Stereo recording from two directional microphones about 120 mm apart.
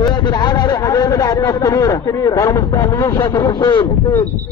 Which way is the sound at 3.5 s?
35° left (ahead or behind).